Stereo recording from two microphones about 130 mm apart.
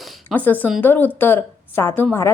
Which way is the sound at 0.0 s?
10° left (ahead or behind).